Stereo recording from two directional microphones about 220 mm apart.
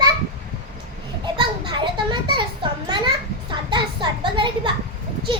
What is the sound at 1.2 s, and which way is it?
Children playing, 20° right (ahead or behind).